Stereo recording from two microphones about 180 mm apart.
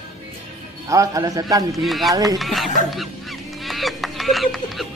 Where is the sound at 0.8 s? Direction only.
20° right (ahead or behind).